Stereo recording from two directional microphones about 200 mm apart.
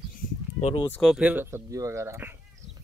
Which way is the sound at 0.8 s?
5° left (ahead or behind).